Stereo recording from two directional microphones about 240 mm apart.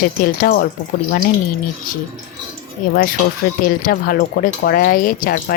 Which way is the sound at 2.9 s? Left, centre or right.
Left.